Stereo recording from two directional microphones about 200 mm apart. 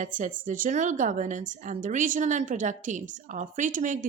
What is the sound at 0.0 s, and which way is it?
A woman's voice, 40° right (ahead or behind).